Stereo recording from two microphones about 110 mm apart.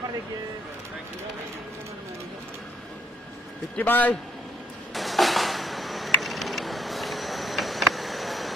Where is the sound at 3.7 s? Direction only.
15° left (ahead or behind).